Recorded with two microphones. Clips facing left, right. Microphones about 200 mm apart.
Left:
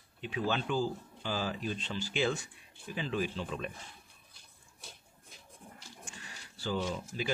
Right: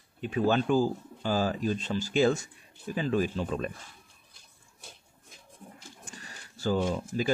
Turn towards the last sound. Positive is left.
turn(degrees=-50)  # may be behind; listen again after turning